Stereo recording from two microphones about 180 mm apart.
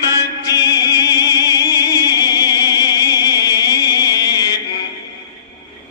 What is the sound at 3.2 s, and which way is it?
Music, 20° left (ahead or behind).